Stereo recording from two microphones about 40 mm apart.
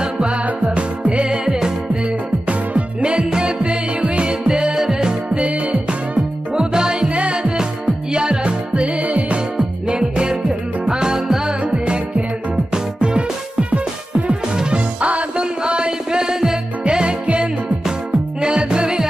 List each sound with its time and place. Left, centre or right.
0.0 s music: right
5.3 s music: right
6.1 s music: right